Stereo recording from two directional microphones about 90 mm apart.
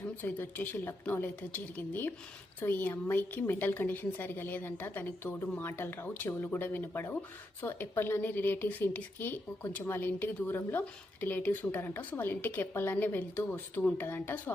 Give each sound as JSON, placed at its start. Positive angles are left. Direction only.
{"t": 0.2, "sound": "a woman's voice", "side_deg": 20}